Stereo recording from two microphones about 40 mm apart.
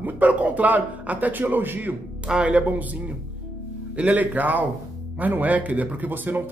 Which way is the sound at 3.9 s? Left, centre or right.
Right.